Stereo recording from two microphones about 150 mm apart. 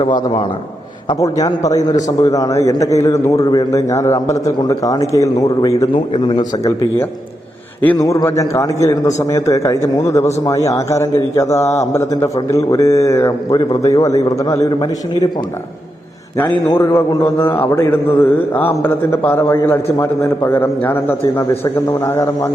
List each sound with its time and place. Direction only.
1.2 s a man's voice: 25° left (ahead or behind)
5.9 s a man's voice: 35° left (ahead or behind)
7.8 s a man's voice: 15° left (ahead or behind)
16.6 s a man's voice: 15° left (ahead or behind)